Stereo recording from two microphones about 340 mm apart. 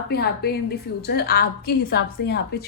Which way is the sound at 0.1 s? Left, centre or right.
Left.